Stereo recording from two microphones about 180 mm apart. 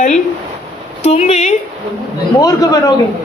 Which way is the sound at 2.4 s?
20° left (ahead or behind).